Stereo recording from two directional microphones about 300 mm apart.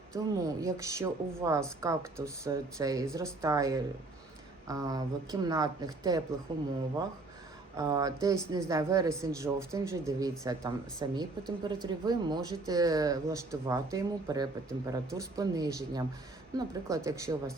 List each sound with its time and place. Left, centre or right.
0.1 s speech: centre
7.8 s speech: centre